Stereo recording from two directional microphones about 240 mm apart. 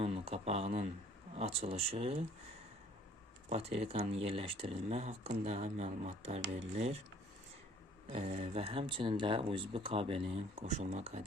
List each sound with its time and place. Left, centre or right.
0.0 s speech: right
3.5 s speech: right
8.1 s speech: right